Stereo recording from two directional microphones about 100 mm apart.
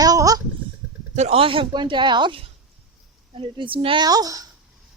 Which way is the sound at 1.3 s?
65° right (ahead or behind).